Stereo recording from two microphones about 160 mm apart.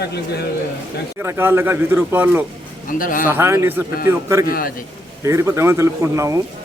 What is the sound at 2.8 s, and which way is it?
Speech, 60° left (ahead or behind).